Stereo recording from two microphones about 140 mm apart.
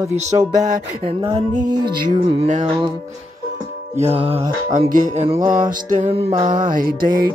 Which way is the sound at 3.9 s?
45° right (ahead or behind).